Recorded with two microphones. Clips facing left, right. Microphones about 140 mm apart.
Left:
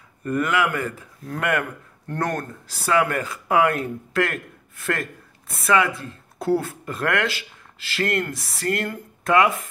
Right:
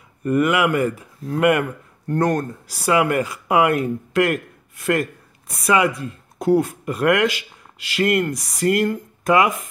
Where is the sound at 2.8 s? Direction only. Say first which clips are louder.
Right 3 dB; 15° right (ahead or behind).